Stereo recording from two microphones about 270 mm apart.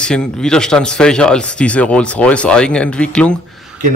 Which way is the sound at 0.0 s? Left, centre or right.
Centre.